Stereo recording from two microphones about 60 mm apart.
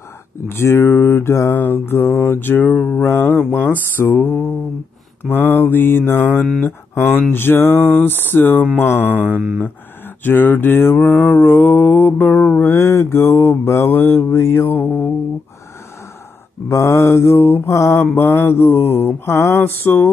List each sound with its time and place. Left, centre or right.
0.5 s mantra: left
9.1 s mantra: right
10.2 s mantra: left
12.7 s mantra: left
16.6 s mantra: left
17.6 s mantra: left
18.1 s mantra: left